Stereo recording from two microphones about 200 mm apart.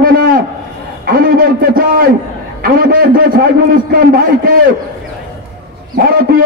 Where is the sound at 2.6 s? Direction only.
45° right (ahead or behind).